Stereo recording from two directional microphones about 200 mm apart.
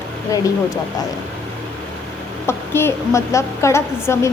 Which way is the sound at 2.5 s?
10° left (ahead or behind).